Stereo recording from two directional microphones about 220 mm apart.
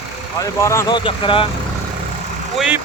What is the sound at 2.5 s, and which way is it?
Speech, 5° right (ahead or behind).